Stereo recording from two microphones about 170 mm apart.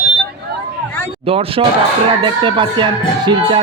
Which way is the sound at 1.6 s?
35° right (ahead or behind).